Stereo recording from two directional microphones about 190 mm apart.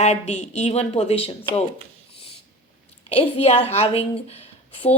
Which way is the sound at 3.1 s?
30° left (ahead or behind).